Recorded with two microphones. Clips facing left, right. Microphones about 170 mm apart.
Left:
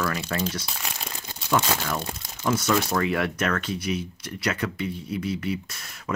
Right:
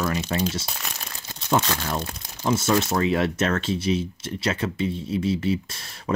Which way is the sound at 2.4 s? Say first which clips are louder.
Right 2 dB; 25° right (ahead or behind).